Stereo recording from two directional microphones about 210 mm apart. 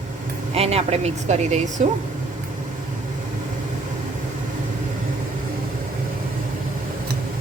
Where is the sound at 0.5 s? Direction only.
30° right (ahead or behind).